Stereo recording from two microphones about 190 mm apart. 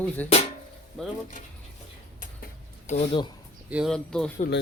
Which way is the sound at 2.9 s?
40° left (ahead or behind).